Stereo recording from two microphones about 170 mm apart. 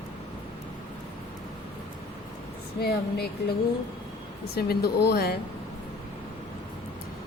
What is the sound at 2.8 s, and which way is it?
Speech, 65° left (ahead or behind).